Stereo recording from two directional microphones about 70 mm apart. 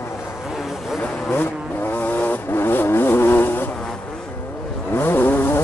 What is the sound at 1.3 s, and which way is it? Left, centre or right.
Vehicle, left.